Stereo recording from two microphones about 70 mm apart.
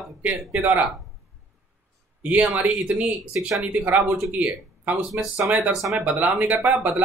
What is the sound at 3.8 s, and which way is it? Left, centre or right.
A man's voice, right.